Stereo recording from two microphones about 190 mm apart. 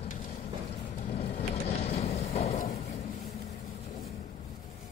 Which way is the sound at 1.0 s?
40° left (ahead or behind).